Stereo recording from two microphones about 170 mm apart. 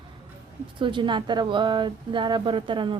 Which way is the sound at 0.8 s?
30° right (ahead or behind).